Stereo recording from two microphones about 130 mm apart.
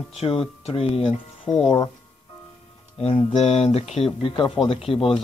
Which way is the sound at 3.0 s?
50° left (ahead or behind).